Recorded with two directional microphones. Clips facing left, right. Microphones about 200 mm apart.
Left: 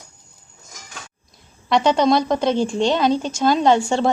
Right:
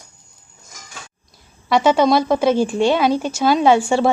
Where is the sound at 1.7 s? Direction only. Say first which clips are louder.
Right 2 dB; 5° right (ahead or behind).